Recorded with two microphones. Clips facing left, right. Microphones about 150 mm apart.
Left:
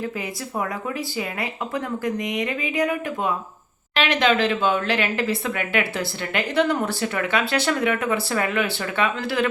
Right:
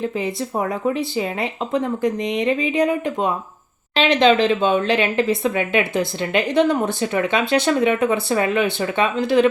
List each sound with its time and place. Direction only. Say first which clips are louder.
0.5 s speech: right 5 dB; 25° right (ahead or behind)